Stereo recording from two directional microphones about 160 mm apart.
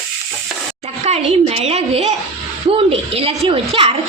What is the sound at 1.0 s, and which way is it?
A child's voice, 40° right (ahead or behind).